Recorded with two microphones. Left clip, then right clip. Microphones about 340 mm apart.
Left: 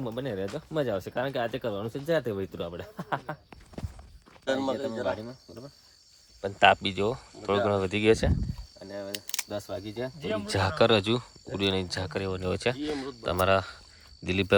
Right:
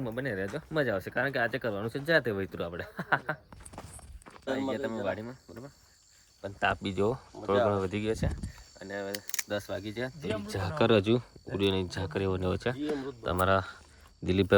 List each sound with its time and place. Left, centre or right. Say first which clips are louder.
0.0 s speech: left 1 dB; centre
4.4 s speech: left 4 dB; left
5.2 s speech: left 1 dB; centre
6.4 s speech: left 9 dB; centre
6.8 s speech: left 1 dB; centre
8.0 s speech: left 10 dB; left
8.8 s camera: right 1 dB; centre
9.1 s camera: left 2 dB; centre
9.5 s speech: right 1 dB; centre
10.2 s speech: left 4 dB; left
10.8 s speech: left 1 dB; centre